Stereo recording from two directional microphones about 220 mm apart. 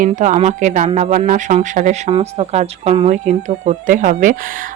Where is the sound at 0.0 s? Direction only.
35° right (ahead or behind).